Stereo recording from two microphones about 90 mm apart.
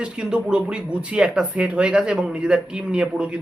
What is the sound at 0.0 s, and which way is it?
Speech, 10° right (ahead or behind).